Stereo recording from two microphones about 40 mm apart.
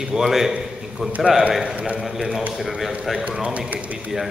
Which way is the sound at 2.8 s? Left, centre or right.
Centre.